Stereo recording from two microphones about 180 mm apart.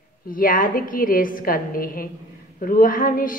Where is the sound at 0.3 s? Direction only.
50° left (ahead or behind).